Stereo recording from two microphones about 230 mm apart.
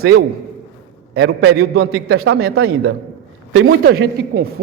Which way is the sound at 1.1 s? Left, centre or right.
Right.